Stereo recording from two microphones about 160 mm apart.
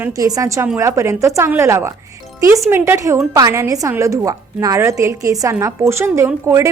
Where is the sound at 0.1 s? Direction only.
20° right (ahead or behind).